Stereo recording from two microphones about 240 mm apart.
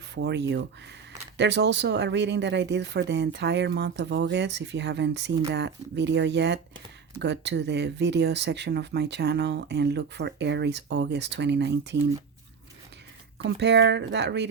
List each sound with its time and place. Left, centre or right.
0.1 s speech: right
13.4 s speech: right